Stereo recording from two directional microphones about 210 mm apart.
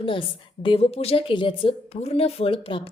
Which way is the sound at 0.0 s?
25° left (ahead or behind).